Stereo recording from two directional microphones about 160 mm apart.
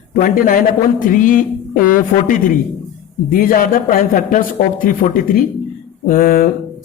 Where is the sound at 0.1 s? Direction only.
60° left (ahead or behind).